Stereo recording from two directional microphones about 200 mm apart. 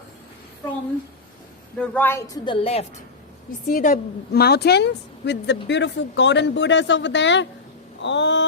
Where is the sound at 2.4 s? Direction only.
25° left (ahead or behind).